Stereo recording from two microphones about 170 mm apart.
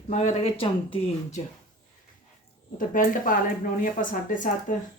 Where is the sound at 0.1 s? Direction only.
45° left (ahead or behind).